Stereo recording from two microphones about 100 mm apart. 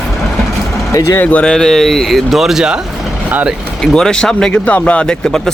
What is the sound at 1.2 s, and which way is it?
Speech, 10° left (ahead or behind).